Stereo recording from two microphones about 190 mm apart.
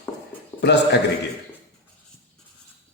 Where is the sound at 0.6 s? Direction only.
65° left (ahead or behind).